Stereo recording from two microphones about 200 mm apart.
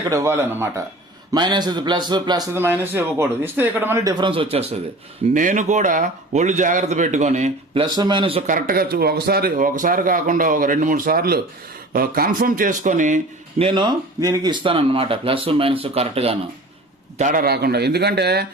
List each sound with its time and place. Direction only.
0.1 s a man's voice: 15° right (ahead or behind)
8.4 s speech: 45° right (ahead or behind)
13.7 s speech: 20° right (ahead or behind)
17.2 s speech: 40° right (ahead or behind)